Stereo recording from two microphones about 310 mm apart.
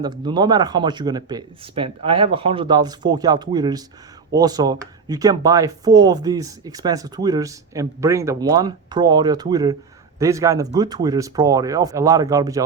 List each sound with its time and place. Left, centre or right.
0.0 s speech: centre